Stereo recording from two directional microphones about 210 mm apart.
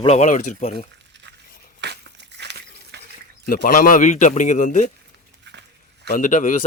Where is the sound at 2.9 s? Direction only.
55° right (ahead or behind).